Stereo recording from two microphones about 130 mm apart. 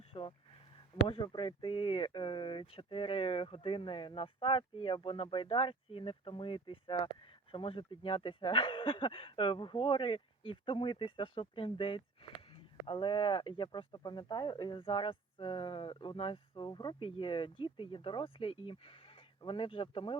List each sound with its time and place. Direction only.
0.0 s speech: 45° left (ahead or behind)